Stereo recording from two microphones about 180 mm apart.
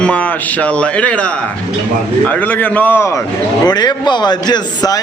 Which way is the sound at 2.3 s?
10° left (ahead or behind).